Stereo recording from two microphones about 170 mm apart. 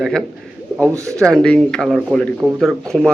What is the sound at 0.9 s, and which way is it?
Speech, 20° right (ahead or behind).